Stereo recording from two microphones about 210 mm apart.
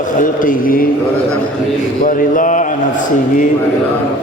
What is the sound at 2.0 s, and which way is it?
A man's voice, 40° left (ahead or behind).